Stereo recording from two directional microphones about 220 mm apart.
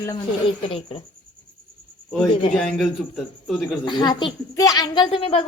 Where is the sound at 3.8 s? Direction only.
20° left (ahead or behind).